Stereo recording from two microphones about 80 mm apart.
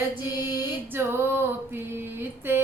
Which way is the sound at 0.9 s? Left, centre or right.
Right.